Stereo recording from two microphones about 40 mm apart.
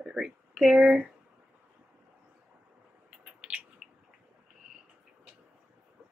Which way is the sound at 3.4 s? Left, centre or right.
Right.